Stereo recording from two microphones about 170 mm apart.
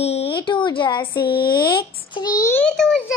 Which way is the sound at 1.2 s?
65° left (ahead or behind).